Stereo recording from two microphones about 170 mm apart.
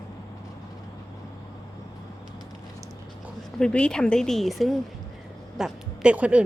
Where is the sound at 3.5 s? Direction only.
5° left (ahead or behind).